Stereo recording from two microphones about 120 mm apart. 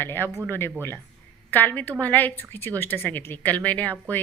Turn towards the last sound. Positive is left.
turn(degrees=15)  # may be behind; listen again after turning